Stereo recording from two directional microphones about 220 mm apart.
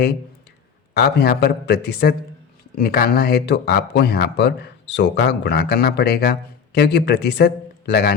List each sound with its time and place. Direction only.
0.9 s speech: 45° left (ahead or behind)